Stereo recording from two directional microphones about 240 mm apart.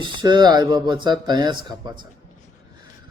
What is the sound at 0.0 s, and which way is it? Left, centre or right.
A man's voice, centre.